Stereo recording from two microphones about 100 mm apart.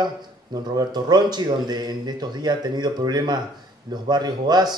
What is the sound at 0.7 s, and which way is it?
A man's voice, 45° right (ahead or behind).